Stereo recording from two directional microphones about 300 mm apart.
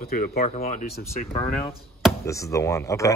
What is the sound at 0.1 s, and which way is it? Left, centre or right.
Speech, left.